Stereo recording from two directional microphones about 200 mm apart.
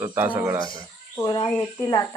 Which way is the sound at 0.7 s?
25° left (ahead or behind).